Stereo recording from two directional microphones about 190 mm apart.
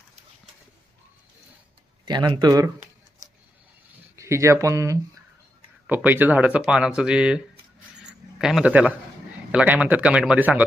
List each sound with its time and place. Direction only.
2.0 s speech: 25° right (ahead or behind)
4.1 s speech: 15° right (ahead or behind)